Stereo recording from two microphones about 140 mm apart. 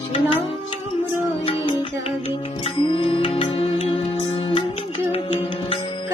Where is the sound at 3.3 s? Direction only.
45° left (ahead or behind).